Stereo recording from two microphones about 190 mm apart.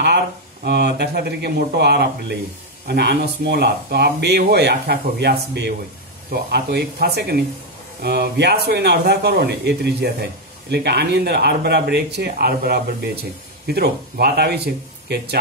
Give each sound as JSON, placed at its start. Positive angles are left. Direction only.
{"t": 0.7, "sound": "speech", "side_deg": -60}